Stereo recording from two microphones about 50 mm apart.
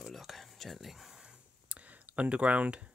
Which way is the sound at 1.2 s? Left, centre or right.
Right.